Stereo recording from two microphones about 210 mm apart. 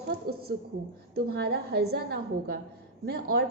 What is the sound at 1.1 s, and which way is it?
A woman's voice, 50° right (ahead or behind).